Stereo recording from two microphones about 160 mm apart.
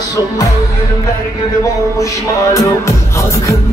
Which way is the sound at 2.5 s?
20° left (ahead or behind).